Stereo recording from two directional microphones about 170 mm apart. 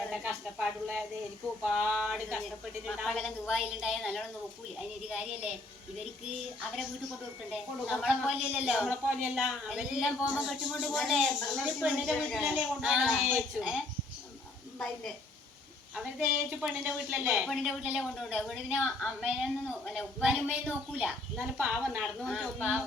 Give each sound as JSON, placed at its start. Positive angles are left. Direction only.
{"t": 0.1, "sound": "a sound", "side_deg": -5}
{"t": 1.6, "sound": "a woman's voice", "side_deg": -5}
{"t": 7.5, "sound": "a woman's voice", "side_deg": -5}
{"t": 16.0, "sound": "a woman's voice", "side_deg": -5}